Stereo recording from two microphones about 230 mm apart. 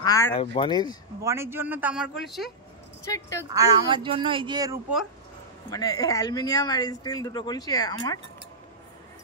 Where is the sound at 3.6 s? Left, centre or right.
Centre.